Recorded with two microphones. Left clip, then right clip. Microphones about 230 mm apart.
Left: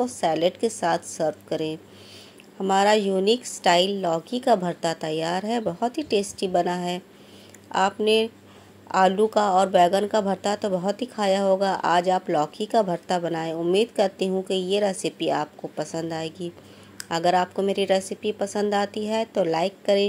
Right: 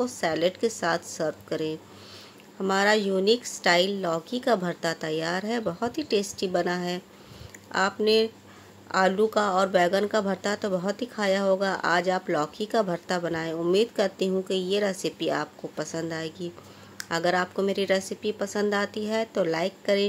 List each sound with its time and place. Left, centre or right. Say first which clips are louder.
0.0 s speech: left 3 dB; centre